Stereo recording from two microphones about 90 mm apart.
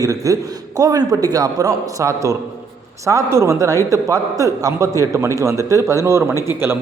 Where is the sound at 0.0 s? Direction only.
40° right (ahead or behind).